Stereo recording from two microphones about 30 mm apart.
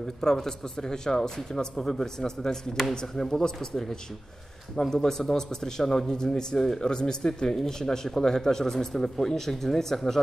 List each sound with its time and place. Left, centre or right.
0.2 s a man's voice: centre
4.7 s a man's voice: centre